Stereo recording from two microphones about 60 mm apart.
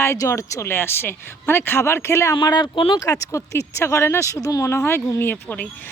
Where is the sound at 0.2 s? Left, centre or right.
Left.